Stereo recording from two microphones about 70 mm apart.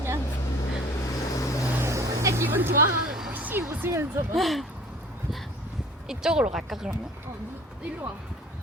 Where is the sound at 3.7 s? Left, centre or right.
Right.